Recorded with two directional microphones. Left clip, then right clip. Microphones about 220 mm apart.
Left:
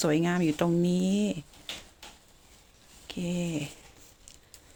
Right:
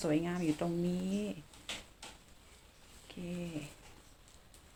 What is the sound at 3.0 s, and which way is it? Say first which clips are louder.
Speech: left 10 dB; 50° left (ahead or behind).